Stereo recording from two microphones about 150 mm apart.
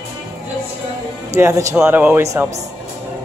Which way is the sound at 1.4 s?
20° right (ahead or behind).